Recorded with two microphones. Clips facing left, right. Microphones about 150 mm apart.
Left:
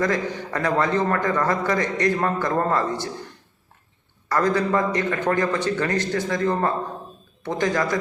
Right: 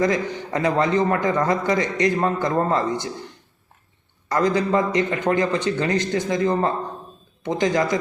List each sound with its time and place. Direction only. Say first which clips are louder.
0.0 s a man's voice: right 2 dB; 20° right (ahead or behind)
4.3 s a man's voice: right 1 dB; 20° right (ahead or behind)